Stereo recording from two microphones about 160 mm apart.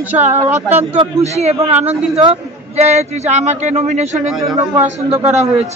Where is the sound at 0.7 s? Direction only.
40° right (ahead or behind).